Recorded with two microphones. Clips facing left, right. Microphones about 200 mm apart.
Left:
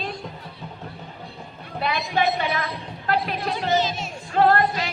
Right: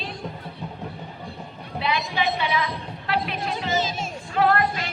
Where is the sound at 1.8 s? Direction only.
50° left (ahead or behind).